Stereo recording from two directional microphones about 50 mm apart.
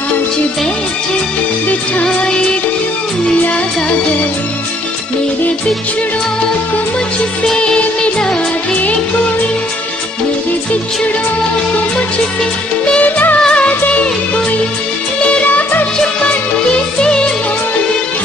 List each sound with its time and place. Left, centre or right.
7.4 s music: centre
13.0 s music of bollywood: left
13.4 s music of bollywood: left
15.2 s music: left